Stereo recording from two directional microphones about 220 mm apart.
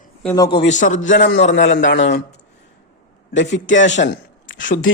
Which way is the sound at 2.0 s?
50° left (ahead or behind).